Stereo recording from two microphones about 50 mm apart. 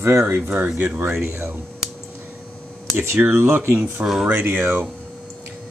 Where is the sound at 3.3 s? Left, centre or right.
Right.